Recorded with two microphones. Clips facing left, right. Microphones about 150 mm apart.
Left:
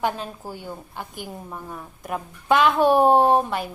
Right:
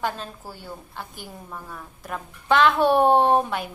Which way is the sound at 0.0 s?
15° left (ahead or behind).